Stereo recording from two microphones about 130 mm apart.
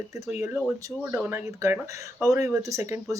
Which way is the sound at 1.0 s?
15° right (ahead or behind).